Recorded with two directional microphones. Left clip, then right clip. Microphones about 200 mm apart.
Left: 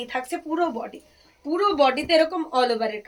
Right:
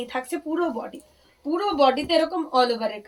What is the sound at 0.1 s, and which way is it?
Speech, 15° left (ahead or behind).